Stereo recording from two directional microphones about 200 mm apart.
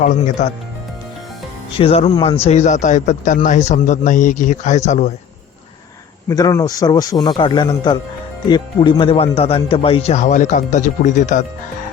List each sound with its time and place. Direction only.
0.0 s a man's voice: 35° left (ahead or behind)
1.8 s a man's voice: 30° left (ahead or behind)
6.2 s a man's voice: 20° left (ahead or behind); by 11.4 s 35° left (ahead or behind)